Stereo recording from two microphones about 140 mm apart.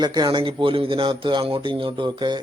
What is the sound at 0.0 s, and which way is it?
A man's voice, 30° right (ahead or behind).